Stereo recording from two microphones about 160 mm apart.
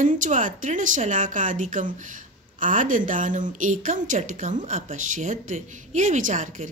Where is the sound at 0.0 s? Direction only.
55° right (ahead or behind).